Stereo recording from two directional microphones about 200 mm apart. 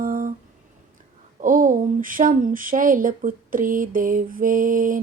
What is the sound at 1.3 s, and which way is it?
Speech, 40° right (ahead or behind).